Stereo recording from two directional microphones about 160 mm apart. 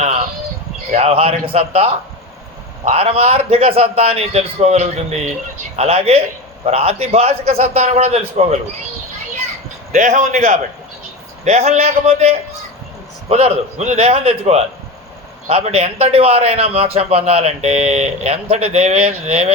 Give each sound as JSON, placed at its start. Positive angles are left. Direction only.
{"t": 0.9, "sound": "a man's voice", "side_deg": -40}
{"t": 9.9, "sound": "a man's voice", "side_deg": -50}